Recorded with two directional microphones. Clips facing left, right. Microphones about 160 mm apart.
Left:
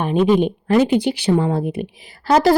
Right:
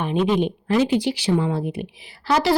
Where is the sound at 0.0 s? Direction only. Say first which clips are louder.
Left 5 dB; 45° left (ahead or behind).